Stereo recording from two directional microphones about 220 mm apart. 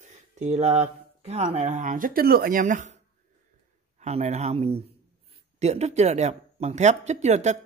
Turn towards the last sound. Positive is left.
turn(degrees=-30)  # may be behind; listen again after turning